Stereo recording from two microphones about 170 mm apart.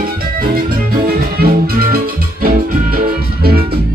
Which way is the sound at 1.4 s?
60° right (ahead or behind).